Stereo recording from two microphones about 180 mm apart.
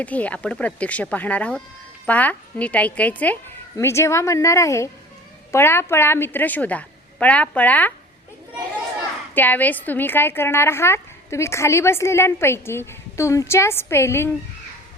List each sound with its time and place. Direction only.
0.0 s a woman's voice: 10° left (ahead or behind)
9.3 s a woman's voice: 10° left (ahead or behind)